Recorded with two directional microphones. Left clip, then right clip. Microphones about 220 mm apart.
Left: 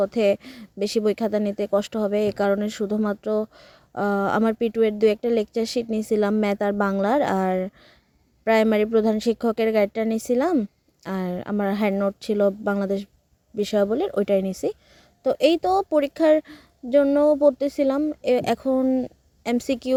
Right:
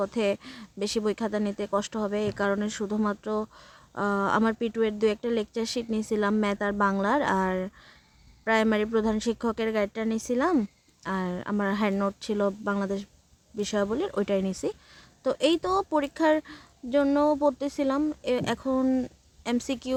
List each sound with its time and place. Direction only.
0.0 s speech: 20° left (ahead or behind)